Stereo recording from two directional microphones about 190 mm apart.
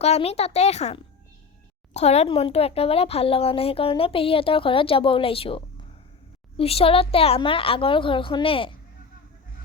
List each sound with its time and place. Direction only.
0.0 s speech: 35° left (ahead or behind)